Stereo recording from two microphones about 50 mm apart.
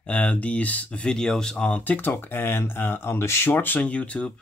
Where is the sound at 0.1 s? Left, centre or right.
Left.